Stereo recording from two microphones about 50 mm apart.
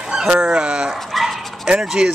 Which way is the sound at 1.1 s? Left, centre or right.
Centre.